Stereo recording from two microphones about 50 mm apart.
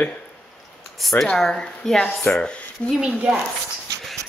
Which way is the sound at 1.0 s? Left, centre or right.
Centre.